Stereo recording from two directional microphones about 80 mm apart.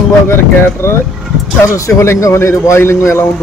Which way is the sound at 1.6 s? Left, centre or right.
Left.